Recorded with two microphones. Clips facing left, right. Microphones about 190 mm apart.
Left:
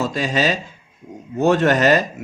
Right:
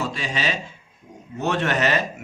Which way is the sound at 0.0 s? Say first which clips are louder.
Left 7 dB; 40° left (ahead or behind).